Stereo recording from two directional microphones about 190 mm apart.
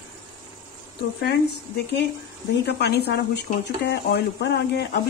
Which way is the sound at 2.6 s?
60° left (ahead or behind).